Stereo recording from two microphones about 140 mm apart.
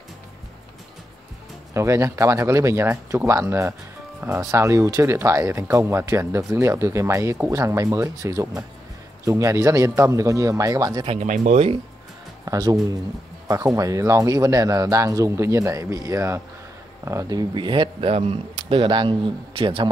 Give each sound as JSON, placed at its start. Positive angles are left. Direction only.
{"t": 1.7, "sound": "speech", "side_deg": -20}
{"t": 11.1, "sound": "speech", "side_deg": -60}
{"t": 12.4, "sound": "speech", "side_deg": -30}